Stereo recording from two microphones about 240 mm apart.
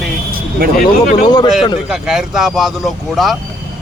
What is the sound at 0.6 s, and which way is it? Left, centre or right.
Speech, right.